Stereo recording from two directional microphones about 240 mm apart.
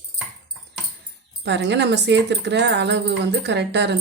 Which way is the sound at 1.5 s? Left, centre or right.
Right.